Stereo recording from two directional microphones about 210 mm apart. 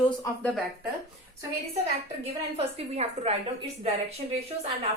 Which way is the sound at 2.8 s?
30° right (ahead or behind).